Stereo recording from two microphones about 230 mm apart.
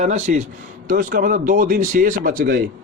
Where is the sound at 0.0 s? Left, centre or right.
Right.